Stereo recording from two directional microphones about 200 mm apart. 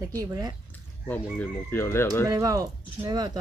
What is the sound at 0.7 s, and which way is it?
Speech, 10° left (ahead or behind).